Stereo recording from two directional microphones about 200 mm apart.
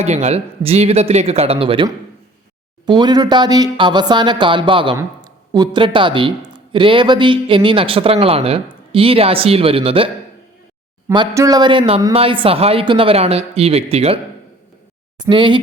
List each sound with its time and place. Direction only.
0.0 s speech: 35° right (ahead or behind)
11.1 s speech: 20° right (ahead or behind)
15.2 s speech: 25° right (ahead or behind)